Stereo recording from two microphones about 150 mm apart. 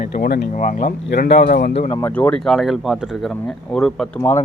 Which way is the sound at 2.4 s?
Centre (ahead or behind).